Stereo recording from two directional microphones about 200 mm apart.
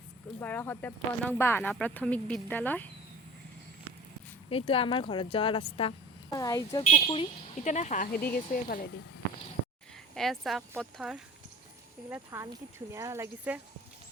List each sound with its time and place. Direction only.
0.3 s speech: 10° left (ahead or behind)
4.4 s speech: 25° left (ahead or behind)
6.3 s speech: 15° left (ahead or behind)
6.9 s speech: 30° left (ahead or behind)
10.2 s speech: centre (ahead or behind)